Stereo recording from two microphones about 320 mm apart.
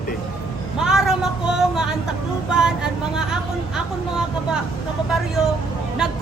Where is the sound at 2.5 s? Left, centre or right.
Centre.